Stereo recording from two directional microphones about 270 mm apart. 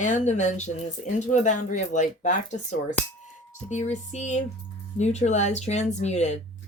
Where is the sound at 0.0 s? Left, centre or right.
Left.